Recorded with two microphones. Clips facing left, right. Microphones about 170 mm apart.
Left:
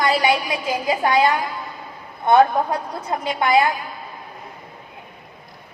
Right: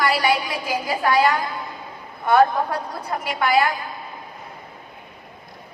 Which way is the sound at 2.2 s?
20° left (ahead or behind).